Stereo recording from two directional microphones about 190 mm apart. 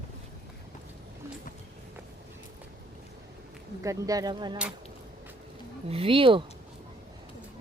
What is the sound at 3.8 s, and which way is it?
Speech, 15° right (ahead or behind).